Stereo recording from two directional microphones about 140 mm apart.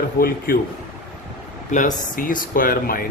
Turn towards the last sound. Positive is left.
turn(degrees=90)